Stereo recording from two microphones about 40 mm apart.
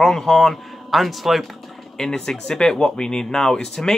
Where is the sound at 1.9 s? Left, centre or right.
Centre.